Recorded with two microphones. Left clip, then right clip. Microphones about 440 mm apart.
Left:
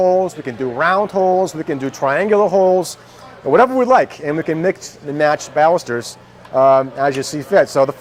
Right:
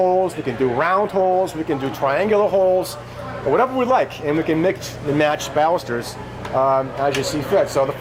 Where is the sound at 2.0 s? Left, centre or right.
Left.